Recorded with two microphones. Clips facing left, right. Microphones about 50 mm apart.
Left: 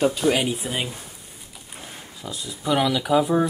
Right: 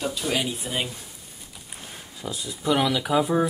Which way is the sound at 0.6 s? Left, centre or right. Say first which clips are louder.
Left 1 dB; centre.